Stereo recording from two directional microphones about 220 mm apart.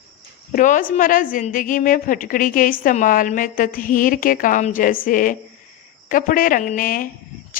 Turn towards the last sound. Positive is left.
turn(degrees=40)  # may be behind; listen again after turning